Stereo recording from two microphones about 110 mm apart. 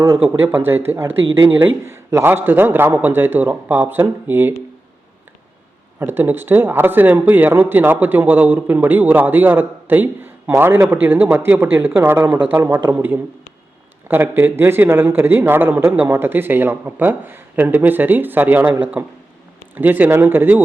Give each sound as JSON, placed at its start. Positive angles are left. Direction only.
{"t": 0.0, "sound": "a man's voice", "side_deg": -20}
{"t": 6.0, "sound": "a man's voice", "side_deg": -20}